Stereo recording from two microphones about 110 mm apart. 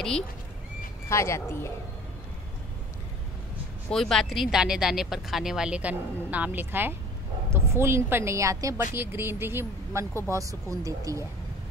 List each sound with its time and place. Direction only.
1.0 s speech: 25° left (ahead or behind)
3.9 s a woman's voice: 5° left (ahead or behind); by 11.2 s 30° right (ahead or behind)